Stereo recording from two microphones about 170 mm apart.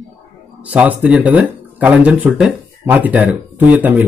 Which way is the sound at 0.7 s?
10° right (ahead or behind).